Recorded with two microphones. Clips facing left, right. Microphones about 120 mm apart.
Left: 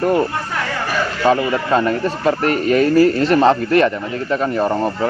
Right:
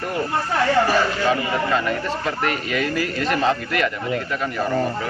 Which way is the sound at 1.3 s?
35° left (ahead or behind).